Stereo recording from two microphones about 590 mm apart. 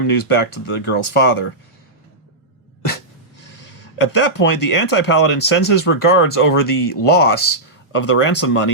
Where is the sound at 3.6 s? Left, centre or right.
Left.